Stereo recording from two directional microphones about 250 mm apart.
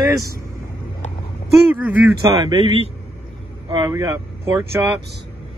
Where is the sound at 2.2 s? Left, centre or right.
Centre.